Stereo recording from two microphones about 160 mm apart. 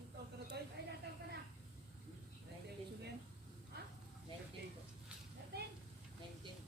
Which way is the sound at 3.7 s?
90° right.